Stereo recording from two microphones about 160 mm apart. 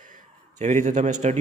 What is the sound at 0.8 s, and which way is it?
Speech, 45° right (ahead or behind).